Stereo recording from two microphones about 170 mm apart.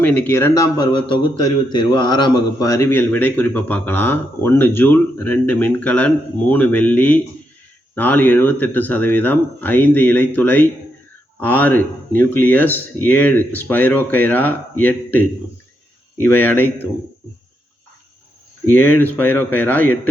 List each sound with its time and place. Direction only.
0.0 s a man's voice: 10° left (ahead or behind)
18.7 s a man's voice: 10° left (ahead or behind)